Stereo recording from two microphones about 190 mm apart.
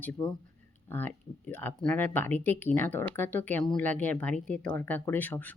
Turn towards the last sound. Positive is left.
turn(degrees=10)  # may be behind; listen again after turning